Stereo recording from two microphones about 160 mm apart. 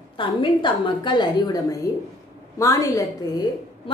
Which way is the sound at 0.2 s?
30° left (ahead or behind).